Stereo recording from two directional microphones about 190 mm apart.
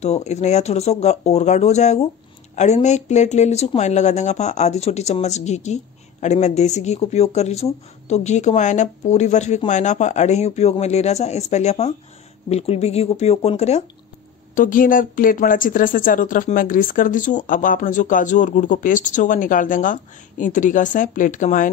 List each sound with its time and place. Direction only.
0.0 s speech: 35° left (ahead or behind)
14.5 s speech: 45° left (ahead or behind)